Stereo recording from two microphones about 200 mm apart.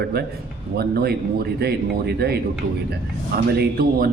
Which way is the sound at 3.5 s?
50° right (ahead or behind).